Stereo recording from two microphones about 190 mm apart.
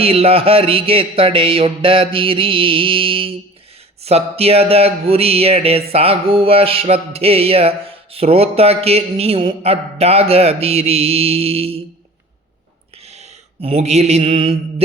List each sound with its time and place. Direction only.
0.0 s a sound: 30° right (ahead or behind)
4.0 s speech: 30° right (ahead or behind)
13.1 s mantra: 35° right (ahead or behind)